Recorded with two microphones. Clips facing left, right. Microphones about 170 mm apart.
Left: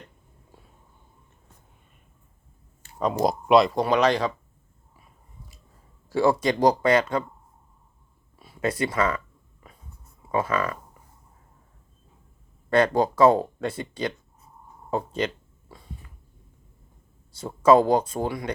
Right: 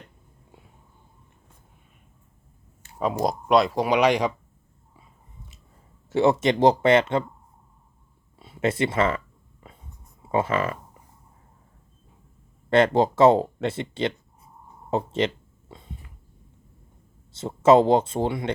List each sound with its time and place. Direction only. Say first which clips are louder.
3.0 s speech: left 1 dB; centre (ahead or behind)
6.1 s speech: right 2 dB; 25° right (ahead or behind)
8.4 s speech: right 2 dB; 25° right (ahead or behind)
9.6 s whispering: right 3 dB; 25° right (ahead or behind)
10.2 s speech: right 2 dB; 25° right (ahead or behind)
12.7 s speech: right 2 dB; 25° right (ahead or behind)
15.7 s a sound: right 1 dB; 20° right (ahead or behind)
17.3 s speech: right 1 dB; 25° right (ahead or behind)